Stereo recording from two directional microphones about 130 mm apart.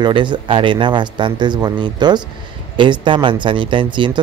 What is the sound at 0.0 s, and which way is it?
Speech, 35° right (ahead or behind).